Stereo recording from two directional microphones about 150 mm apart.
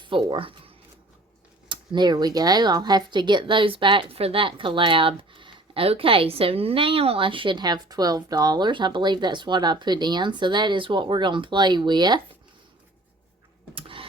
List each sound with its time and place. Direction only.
0.0 s speech: 35° right (ahead or behind)
1.7 s speech: 30° right (ahead or behind)
13.7 s vehicle: 35° right (ahead or behind)